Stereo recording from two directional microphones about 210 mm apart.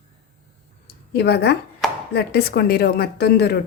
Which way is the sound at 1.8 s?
Centre (ahead or behind).